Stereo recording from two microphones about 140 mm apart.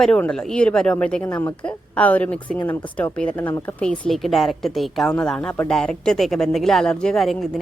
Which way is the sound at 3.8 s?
5° left (ahead or behind).